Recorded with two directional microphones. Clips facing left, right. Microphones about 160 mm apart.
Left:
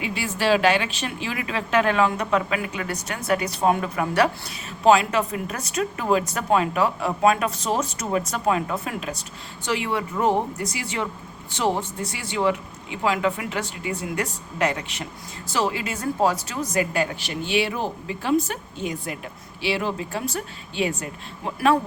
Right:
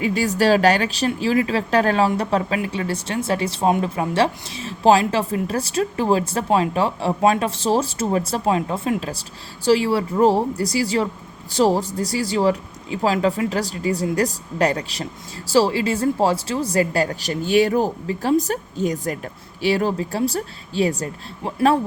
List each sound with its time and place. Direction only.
0.0 s a woman's voice: 40° right (ahead or behind)